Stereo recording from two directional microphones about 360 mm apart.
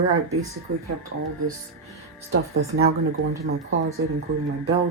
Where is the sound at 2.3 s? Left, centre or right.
Right.